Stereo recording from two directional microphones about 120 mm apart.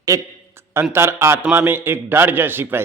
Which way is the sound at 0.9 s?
20° right (ahead or behind).